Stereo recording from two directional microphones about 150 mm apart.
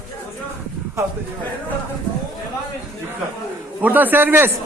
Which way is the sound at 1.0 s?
20° right (ahead or behind).